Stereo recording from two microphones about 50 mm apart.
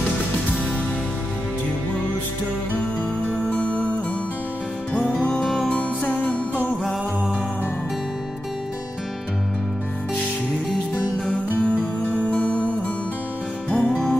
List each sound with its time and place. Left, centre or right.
3.3 s music: left
4.9 s music: left
11.6 s music: left